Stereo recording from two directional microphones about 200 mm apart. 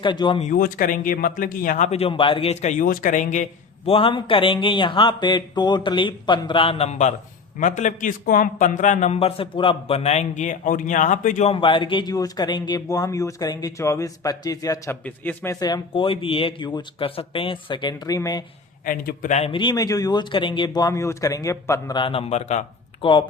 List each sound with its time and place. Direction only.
0.0 s a man's voice: 25° left (ahead or behind)
0.5 s a man's voice: 45° left (ahead or behind); by 18.4 s 20° left (ahead or behind)
18.9 s a man's voice: 45° left (ahead or behind); by 23.2 s 25° left (ahead or behind)